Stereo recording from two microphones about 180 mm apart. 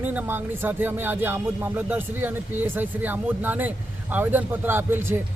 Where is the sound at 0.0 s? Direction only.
10° right (ahead or behind).